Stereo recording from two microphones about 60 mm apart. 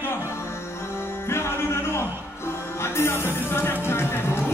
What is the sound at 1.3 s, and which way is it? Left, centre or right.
Music, left.